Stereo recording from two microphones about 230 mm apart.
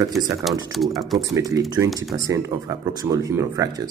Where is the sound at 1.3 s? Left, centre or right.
Centre.